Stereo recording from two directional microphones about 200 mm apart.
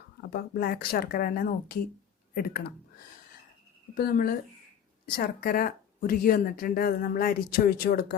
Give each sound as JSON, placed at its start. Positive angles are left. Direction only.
{"t": 0.2, "sound": "speech", "side_deg": 50}
{"t": 3.9, "sound": "speech", "side_deg": 45}